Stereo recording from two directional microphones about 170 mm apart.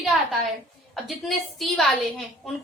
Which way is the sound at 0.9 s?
Centre (ahead or behind).